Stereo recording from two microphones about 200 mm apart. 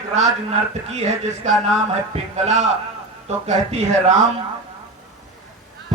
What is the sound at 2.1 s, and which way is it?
Speech, 30° right (ahead or behind).